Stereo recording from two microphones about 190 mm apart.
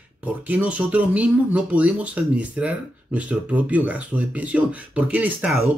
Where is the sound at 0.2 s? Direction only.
10° right (ahead or behind).